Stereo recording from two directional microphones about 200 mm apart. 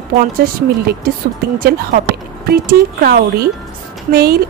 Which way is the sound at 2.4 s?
50° right (ahead or behind).